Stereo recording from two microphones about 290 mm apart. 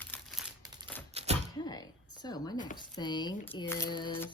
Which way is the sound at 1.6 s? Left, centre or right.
Centre.